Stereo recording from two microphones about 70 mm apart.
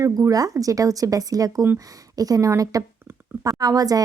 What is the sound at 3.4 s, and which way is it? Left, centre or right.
Speech, right.